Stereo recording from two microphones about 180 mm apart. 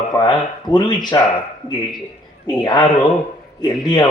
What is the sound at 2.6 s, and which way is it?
Speech, 25° left (ahead or behind).